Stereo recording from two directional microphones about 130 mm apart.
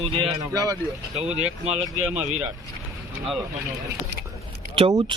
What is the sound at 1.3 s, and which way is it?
Speech, 55° right (ahead or behind).